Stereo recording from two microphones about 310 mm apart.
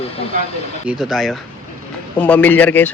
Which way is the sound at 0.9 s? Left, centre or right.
Centre.